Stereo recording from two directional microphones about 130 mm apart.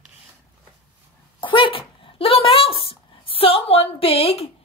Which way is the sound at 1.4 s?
40° left (ahead or behind).